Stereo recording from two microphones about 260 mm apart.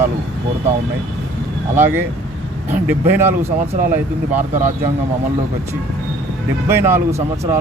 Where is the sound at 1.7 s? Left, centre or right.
Centre.